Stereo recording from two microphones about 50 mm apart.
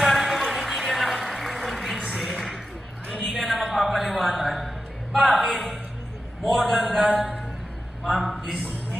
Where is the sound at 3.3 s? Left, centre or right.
Centre.